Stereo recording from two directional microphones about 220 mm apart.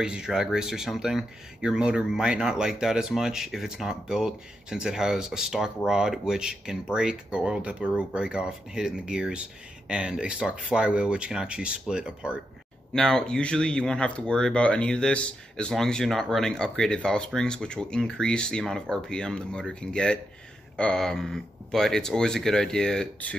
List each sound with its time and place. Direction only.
0.0 s speech: 5° right (ahead or behind)